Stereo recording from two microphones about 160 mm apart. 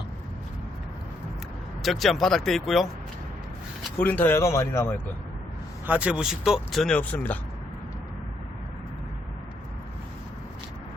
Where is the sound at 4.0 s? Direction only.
10° left (ahead or behind).